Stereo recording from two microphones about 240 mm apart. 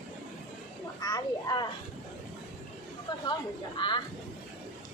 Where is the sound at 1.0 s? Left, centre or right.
Centre.